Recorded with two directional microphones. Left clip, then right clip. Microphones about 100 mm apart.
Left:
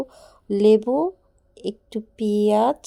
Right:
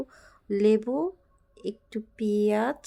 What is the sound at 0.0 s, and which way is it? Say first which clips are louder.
A woman's voice: left 7 dB; 30° left (ahead or behind).